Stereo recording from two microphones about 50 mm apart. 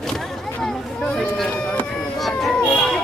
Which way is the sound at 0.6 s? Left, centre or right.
Centre.